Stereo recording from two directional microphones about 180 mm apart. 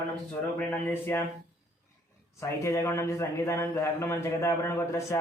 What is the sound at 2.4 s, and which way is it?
A man's voice, 15° left (ahead or behind).